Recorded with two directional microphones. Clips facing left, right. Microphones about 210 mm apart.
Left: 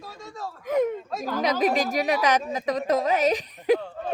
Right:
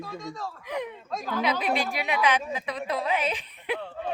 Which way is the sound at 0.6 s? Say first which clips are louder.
Left 11 dB; 45° left (ahead or behind).